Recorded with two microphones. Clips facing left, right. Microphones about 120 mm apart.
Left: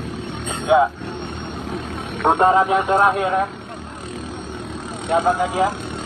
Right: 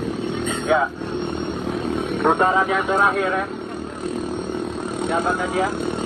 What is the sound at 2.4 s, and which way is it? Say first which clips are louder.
Speech: left 3 dB; 35° left (ahead or behind).